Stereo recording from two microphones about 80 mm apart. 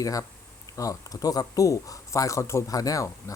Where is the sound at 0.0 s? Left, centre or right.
Left.